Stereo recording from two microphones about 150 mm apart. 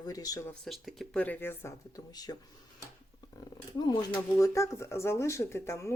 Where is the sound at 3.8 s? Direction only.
25° left (ahead or behind).